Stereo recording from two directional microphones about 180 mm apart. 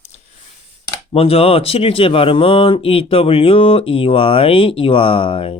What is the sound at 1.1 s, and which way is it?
Speech, 30° left (ahead or behind).